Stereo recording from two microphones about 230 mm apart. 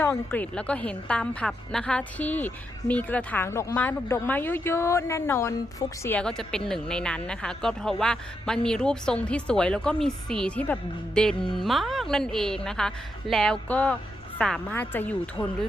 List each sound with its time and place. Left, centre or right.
0.0 s a woman's voice: centre